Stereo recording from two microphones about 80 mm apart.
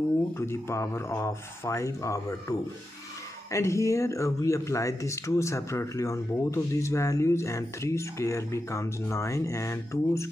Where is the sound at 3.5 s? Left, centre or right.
Left.